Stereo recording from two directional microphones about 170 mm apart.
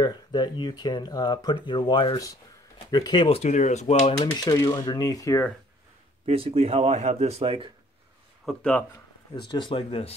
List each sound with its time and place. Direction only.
0.0 s speech: 25° left (ahead or behind); by 4.1 s 40° left (ahead or behind)
4.2 s speech: 25° left (ahead or behind)
6.2 s a man's voice: 35° right (ahead or behind)
8.5 s speech: 10° left (ahead or behind)
9.5 s speech: 30° left (ahead or behind)